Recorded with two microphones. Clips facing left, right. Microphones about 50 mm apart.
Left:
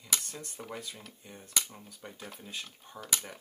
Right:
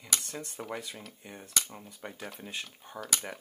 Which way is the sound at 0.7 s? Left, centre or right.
Centre.